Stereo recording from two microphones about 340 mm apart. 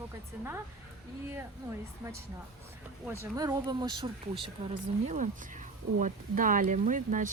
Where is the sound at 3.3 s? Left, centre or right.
Centre.